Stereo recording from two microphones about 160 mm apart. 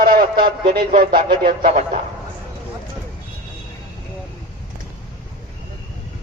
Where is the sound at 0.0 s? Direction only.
65° right (ahead or behind).